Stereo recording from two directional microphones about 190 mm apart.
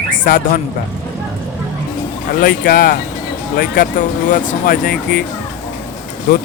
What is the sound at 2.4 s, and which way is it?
Speech, 50° left (ahead or behind).